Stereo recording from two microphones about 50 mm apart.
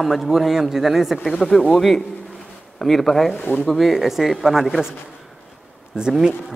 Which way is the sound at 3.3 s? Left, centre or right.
Left.